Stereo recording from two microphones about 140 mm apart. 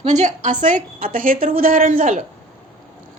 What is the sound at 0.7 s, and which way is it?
A woman's voice, 85° right.